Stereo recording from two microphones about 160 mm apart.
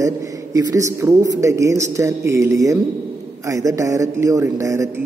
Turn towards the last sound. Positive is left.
turn(degrees=-20)  # may be behind; listen again after turning